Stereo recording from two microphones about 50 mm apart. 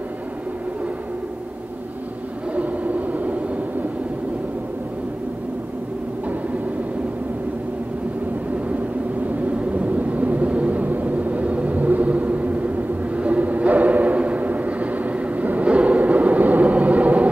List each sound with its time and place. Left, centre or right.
2.5 s vehicle: right
8.5 s vehicle: right